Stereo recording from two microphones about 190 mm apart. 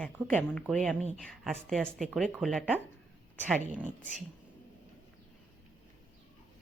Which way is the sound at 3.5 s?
40° right (ahead or behind).